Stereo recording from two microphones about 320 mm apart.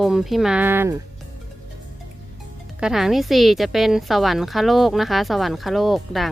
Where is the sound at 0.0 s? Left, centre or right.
Centre.